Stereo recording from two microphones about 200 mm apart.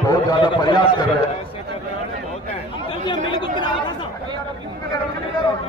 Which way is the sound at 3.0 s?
25° left (ahead or behind).